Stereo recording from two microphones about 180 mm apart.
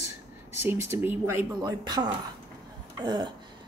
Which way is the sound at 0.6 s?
15° right (ahead or behind).